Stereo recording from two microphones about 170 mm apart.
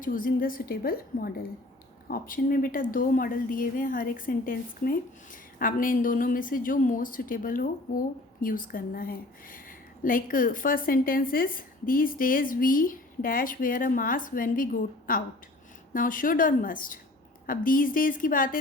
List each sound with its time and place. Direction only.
0.0 s a woman's voice: 55° left (ahead or behind)